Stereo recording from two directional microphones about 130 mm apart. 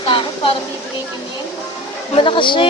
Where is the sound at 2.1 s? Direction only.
40° left (ahead or behind).